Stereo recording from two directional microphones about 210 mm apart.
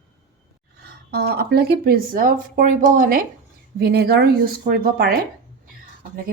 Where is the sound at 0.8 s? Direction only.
50° right (ahead or behind).